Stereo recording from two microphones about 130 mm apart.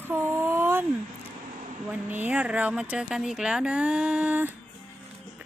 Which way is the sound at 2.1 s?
10° right (ahead or behind).